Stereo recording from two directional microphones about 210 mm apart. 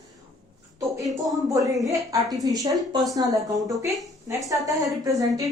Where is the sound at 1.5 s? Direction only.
15° right (ahead or behind).